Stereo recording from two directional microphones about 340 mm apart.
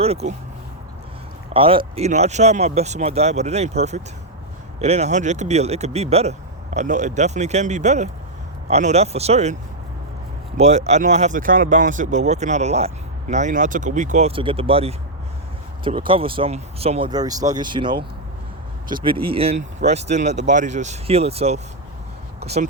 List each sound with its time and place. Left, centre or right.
0.0 s speech: centre
1.5 s speech: centre
10.6 s speech: centre
22.4 s a sound: centre